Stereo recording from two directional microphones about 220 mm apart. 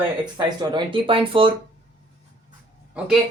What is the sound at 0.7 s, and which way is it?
Speech, 25° right (ahead or behind).